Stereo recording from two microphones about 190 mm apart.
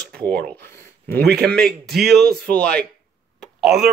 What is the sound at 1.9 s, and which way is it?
A man's voice, centre (ahead or behind).